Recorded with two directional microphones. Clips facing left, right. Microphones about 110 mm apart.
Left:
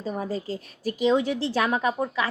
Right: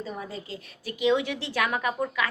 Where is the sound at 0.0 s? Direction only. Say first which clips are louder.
Left 6 dB; 40° left (ahead or behind).